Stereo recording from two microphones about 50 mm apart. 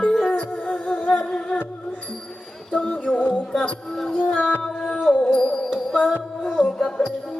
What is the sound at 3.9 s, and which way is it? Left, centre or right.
Music, centre.